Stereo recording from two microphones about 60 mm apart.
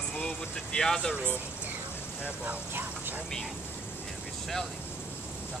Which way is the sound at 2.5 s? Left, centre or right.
Right.